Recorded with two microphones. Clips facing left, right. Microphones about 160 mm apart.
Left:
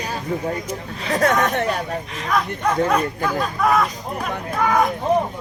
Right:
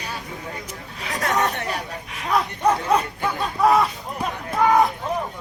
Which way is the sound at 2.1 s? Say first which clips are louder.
Right 2 dB; 20° right (ahead or behind).